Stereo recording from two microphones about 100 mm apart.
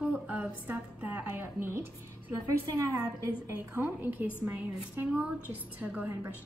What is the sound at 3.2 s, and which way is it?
A woman's voice, 25° right (ahead or behind).